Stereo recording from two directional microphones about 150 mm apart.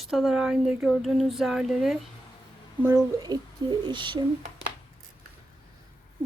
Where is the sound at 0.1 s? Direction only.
Centre (ahead or behind).